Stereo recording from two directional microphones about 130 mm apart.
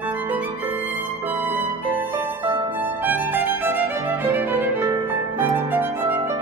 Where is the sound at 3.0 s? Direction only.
15° right (ahead or behind).